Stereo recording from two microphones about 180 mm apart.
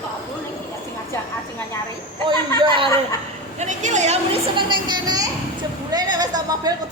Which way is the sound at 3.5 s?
40° right (ahead or behind).